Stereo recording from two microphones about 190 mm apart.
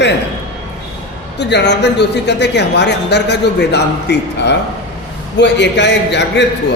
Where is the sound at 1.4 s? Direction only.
65° left (ahead or behind).